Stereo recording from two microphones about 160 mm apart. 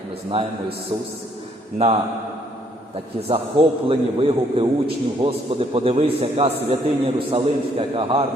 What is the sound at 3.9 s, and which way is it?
A man's voice, 35° right (ahead or behind).